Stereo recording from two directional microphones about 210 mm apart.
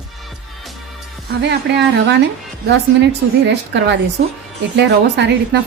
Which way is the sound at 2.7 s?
55° right (ahead or behind).